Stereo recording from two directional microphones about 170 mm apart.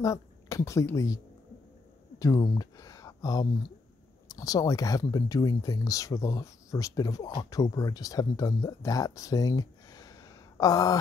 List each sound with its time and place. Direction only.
0.0 s speech: 20° left (ahead or behind)
2.1 s a sound: 20° left (ahead or behind)
4.3 s speech: 20° left (ahead or behind)